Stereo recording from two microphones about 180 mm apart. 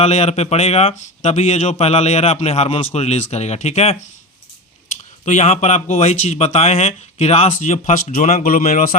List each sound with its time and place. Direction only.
0.0 s speech: 35° left (ahead or behind)
5.2 s speech: 40° left (ahead or behind)